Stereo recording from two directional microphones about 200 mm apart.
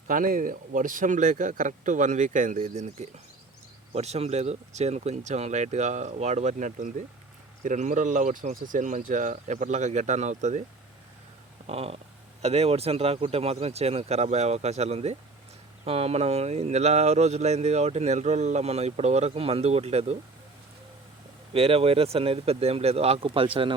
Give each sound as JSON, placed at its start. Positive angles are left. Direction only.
{"t": 0.1, "sound": "speech", "side_deg": -45}
{"t": 11.6, "sound": "a sound", "side_deg": -30}
{"t": 12.4, "sound": "speech", "side_deg": -30}
{"t": 21.5, "sound": "speech", "side_deg": -30}